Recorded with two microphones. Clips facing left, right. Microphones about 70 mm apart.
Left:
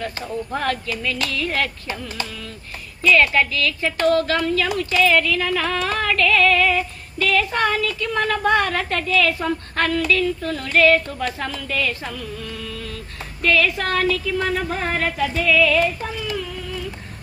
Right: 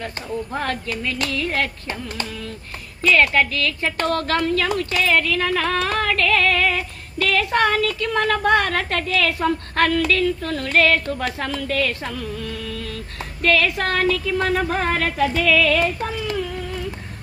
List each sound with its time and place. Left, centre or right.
1.0 s hands: right
3.0 s a woman's voice: right
13.4 s a woman's voice: right
15.3 s music: right